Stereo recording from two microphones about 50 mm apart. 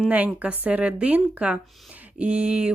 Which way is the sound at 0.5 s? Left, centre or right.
Right.